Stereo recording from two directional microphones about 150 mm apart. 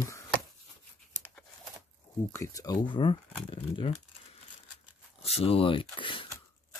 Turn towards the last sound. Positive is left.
turn(degrees=35)  # may be behind; listen again after turning